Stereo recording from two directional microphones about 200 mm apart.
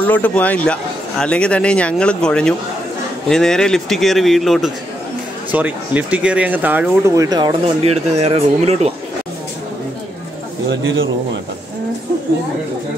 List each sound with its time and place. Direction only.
0.0 s speech: 10° left (ahead or behind); by 8.9 s 30° right (ahead or behind)
10.7 s a man's voice: 70° right (ahead or behind)